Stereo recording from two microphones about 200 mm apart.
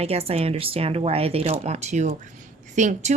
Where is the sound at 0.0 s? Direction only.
30° right (ahead or behind).